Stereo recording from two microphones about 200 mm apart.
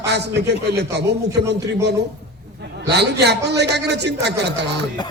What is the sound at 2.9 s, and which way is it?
Speech, 55° right (ahead or behind).